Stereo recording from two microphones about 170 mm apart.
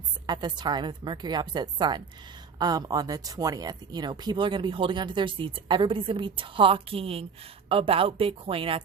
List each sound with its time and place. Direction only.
0.3 s speech: 25° right (ahead or behind)